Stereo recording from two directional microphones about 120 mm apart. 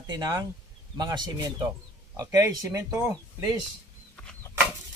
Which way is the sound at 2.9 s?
10° right (ahead or behind).